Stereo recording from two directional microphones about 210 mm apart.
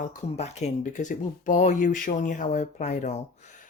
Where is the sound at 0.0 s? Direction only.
35° left (ahead or behind).